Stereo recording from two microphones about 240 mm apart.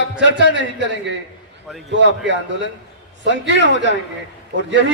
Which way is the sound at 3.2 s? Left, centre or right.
Right.